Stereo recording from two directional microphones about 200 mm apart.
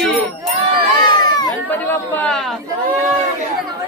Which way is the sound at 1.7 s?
10° left (ahead or behind).